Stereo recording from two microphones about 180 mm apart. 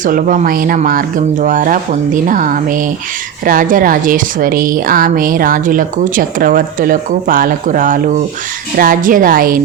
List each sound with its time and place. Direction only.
0.0 s a woman's voice: 50° right (ahead or behind)